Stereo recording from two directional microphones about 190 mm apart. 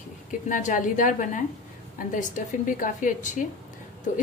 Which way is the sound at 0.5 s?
40° left (ahead or behind).